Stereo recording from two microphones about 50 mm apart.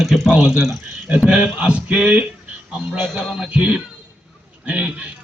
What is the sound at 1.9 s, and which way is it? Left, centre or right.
Speech, centre.